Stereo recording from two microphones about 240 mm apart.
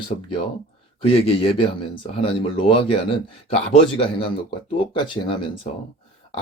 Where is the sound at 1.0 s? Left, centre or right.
Left.